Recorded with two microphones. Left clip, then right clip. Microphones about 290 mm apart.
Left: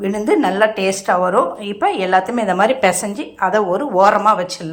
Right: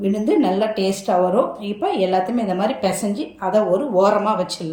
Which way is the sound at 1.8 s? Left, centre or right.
Centre.